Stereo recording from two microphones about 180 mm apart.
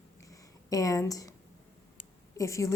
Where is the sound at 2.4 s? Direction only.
15° left (ahead or behind).